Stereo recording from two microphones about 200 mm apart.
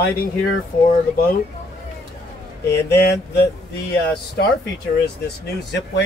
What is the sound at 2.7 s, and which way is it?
Speech, 55° left (ahead or behind).